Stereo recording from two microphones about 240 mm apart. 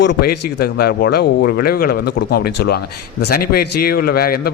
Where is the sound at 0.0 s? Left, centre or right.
Left.